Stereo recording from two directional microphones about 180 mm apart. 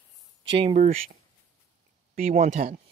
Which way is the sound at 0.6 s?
35° right (ahead or behind).